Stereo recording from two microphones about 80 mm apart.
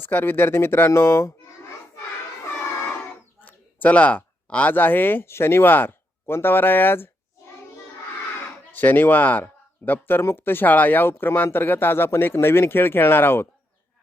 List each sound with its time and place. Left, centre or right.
0.0 s speech: left
3.4 s speech: centre
8.7 s speech: left